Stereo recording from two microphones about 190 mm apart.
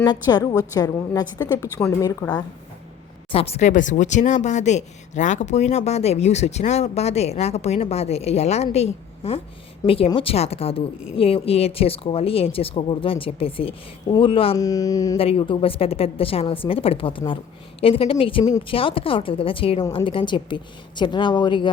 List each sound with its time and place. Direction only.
0.0 s a woman's voice: 20° left (ahead or behind)
3.3 s a woman's voice: 30° left (ahead or behind)
14.6 s a woman's voice: 20° left (ahead or behind)
15.2 s a woman's voice: 30° left (ahead or behind)